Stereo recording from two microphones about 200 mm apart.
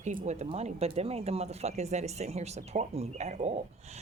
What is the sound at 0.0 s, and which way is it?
A woman's voice, 40° right (ahead or behind).